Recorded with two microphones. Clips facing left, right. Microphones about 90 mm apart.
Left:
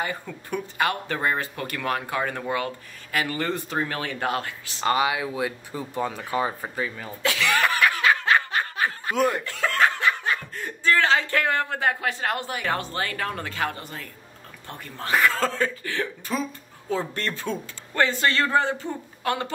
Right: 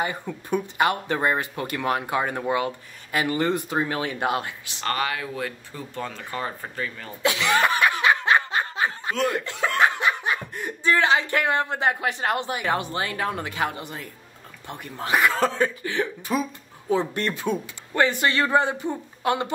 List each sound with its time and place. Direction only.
0.0 s speech: 20° right (ahead or behind)
4.7 s speech: 15° left (ahead or behind)
7.2 s snicker: 20° right (ahead or behind)
9.1 s speech: 15° left (ahead or behind)
9.4 s speech: 20° right (ahead or behind)